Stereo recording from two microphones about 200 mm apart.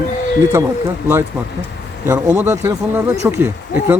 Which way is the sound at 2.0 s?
15° right (ahead or behind).